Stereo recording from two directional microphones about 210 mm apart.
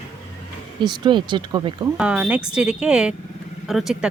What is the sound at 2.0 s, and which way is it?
Speech, 5° right (ahead or behind).